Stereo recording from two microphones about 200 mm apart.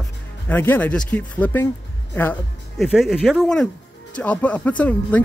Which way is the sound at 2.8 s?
Centre (ahead or behind).